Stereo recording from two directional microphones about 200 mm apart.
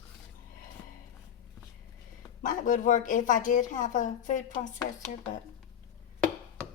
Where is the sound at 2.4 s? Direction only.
40° left (ahead or behind).